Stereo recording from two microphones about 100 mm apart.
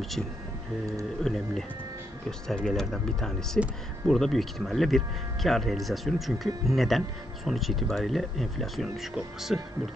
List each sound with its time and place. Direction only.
1.2 s speech: 5° left (ahead or behind)